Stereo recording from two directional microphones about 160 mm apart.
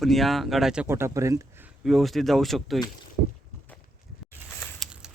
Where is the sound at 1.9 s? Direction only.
Centre (ahead or behind).